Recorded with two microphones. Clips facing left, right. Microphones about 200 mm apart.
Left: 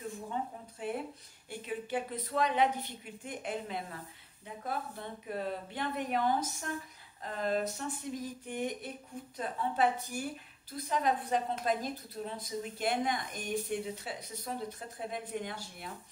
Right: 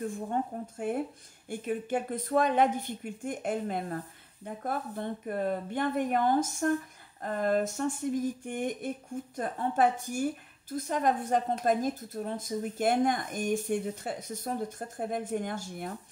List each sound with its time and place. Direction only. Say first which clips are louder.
0.3 s a woman's voice: right 6 dB; 50° right (ahead or behind)